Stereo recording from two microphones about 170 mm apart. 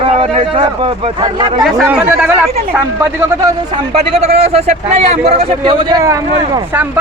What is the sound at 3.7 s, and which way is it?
Speech, 35° right (ahead or behind).